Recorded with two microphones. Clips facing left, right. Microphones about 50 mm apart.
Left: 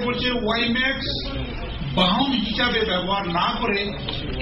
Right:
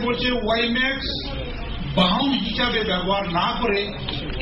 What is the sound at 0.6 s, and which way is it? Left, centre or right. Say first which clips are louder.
Speech: right 1 dB; right.